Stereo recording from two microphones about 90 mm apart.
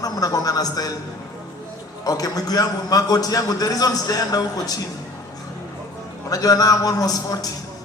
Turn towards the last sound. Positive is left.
turn(degrees=45)  # may be behind; listen again after turning